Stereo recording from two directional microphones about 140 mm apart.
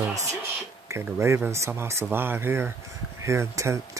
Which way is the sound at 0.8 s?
20° right (ahead or behind).